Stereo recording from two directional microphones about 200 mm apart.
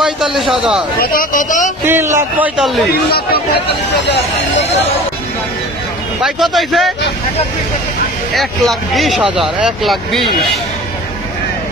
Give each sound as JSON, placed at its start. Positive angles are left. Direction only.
{"t": 0.0, "sound": "a man's voice", "side_deg": 0}
{"t": 0.9, "sound": "a man's voice", "side_deg": 45}
{"t": 1.9, "sound": "a man's voice", "side_deg": -15}
{"t": 3.1, "sound": "speech", "side_deg": 50}
{"t": 6.2, "sound": "speech", "side_deg": 0}
{"t": 8.4, "sound": "speech", "side_deg": 0}